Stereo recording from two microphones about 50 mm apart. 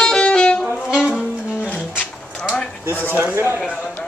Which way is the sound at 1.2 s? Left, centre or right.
Left.